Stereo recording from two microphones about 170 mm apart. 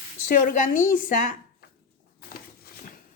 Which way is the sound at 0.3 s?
50° left (ahead or behind).